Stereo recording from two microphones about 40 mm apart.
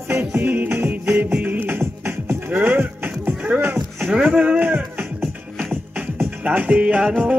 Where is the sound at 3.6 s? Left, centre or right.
Right.